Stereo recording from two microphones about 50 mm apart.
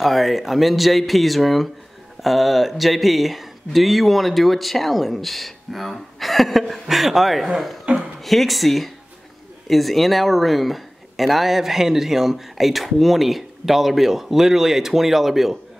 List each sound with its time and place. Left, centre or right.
0.0 s speech: centre
7.9 s speech: right
8.2 s speech: centre